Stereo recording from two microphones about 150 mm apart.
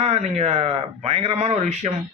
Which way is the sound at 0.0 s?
45° right (ahead or behind).